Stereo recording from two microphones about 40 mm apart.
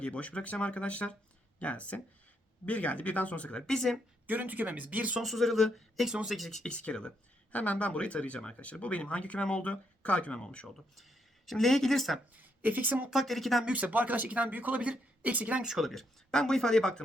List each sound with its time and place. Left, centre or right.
0.0 s speech: left
3.7 s speech: centre
4.3 s speech: right
5.2 s speech: centre
6.7 s speech: left
10.4 s speech: left
11.4 s speech: centre
12.3 s speech: right
13.1 s speech: centre
13.7 s speech: right
15.6 s speech: centre
16.3 s speech: centre